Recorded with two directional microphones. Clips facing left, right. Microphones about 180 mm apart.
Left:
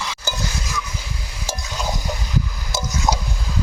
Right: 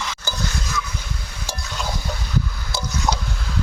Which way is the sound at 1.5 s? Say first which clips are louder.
Left 2 dB; 10° left (ahead or behind).